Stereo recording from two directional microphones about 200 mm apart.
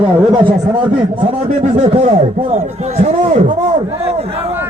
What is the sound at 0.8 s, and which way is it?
A man's voice, 25° right (ahead or behind).